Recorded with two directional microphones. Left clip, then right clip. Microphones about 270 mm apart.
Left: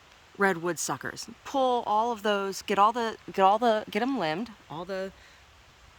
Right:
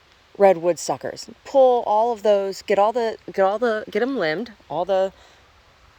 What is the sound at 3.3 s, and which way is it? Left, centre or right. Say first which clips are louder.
Speech: right 2 dB; centre.